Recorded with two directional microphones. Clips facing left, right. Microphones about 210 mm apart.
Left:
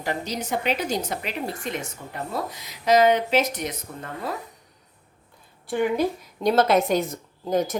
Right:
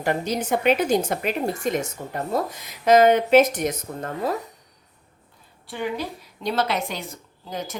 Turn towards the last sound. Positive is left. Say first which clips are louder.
# left 9 dB
turn(degrees=45)  # may be behind; listen again after turning